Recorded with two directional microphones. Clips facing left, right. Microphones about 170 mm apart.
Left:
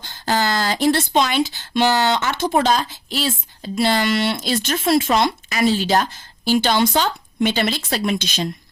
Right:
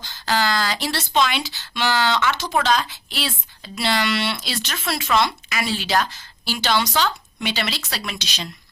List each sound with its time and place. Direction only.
0.0 s speech: 50° left (ahead or behind)